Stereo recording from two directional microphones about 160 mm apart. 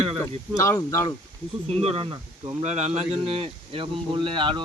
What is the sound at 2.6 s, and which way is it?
Speech, 45° right (ahead or behind).